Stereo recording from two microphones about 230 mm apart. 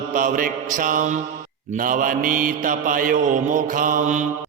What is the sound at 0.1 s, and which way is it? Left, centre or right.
Mantra, right.